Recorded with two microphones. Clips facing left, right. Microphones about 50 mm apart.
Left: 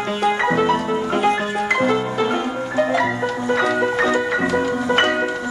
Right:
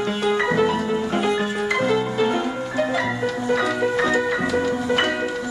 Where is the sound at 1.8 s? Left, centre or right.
Centre; by 5.1 s left.